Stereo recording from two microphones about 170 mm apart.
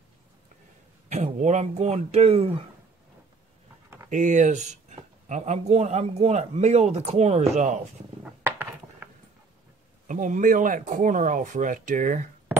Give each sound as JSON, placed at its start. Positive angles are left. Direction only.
{"t": 1.0, "sound": "speech", "side_deg": -40}
{"t": 4.1, "sound": "speech", "side_deg": -50}
{"t": 8.2, "sound": "a sound", "side_deg": -10}
{"t": 10.0, "sound": "speech", "side_deg": -50}